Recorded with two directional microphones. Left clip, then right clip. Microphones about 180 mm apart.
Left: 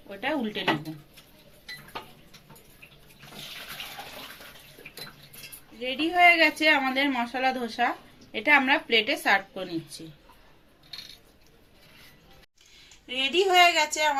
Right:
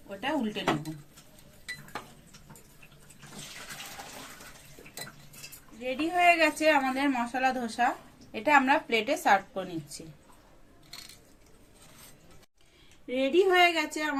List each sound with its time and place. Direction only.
0.1 s a sound: 50° right (ahead or behind)
5.8 s a woman's voice: 50° right (ahead or behind)
13.1 s a woman's voice: 25° right (ahead or behind)